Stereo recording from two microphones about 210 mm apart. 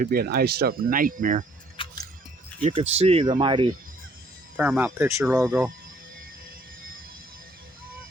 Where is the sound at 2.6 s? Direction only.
30° right (ahead or behind).